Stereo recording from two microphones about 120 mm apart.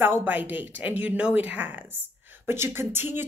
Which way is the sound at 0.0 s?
15° right (ahead or behind).